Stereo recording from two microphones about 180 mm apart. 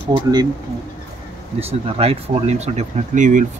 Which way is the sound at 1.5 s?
35° right (ahead or behind).